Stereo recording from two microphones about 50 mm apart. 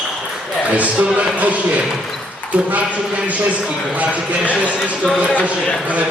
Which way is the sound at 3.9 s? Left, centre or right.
Right.